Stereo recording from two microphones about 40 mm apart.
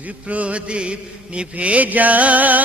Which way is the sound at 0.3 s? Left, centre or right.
Right.